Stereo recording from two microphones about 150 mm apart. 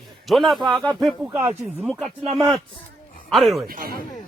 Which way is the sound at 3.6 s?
85° right.